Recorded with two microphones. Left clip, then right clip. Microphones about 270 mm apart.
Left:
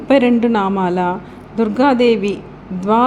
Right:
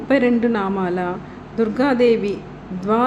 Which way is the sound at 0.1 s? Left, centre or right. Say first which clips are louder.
Left 4 dB; left.